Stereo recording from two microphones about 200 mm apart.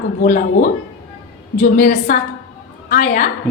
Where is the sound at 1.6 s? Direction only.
40° left (ahead or behind).